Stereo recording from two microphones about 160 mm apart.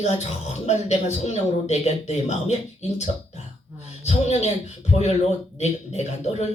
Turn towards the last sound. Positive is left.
turn(degrees=45)  # may be behind; listen again after turning